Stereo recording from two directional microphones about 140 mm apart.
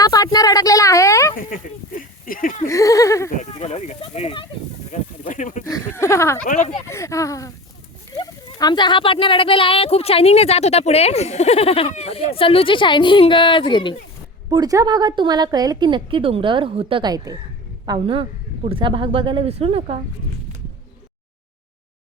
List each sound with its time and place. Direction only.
0.0 s a sound: 25° left (ahead or behind)
2.0 s speech: 85° left
2.6 s speech: 25° left (ahead or behind)
3.3 s speech: 50° left (ahead or behind)
4.9 s goat: 65° left (ahead or behind)
5.6 s a sound: 20° left (ahead or behind)
6.4 s speech: 60° left (ahead or behind)
6.8 s speech: 20° left (ahead or behind)
14.5 s a woman's voice: 25° right (ahead or behind); by 20.0 s 45° right (ahead or behind)